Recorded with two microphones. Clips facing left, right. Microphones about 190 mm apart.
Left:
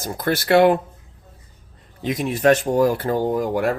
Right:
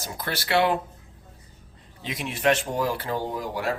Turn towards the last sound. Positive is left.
turn(degrees=50)  # may be behind; listen again after turning